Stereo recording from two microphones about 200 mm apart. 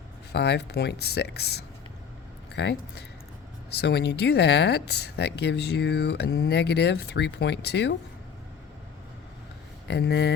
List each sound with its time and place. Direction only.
0.3 s speech: 55° left (ahead or behind)
9.9 s speech: 55° left (ahead or behind)